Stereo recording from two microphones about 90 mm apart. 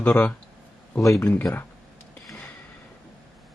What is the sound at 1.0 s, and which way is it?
Speech, 35° left (ahead or behind).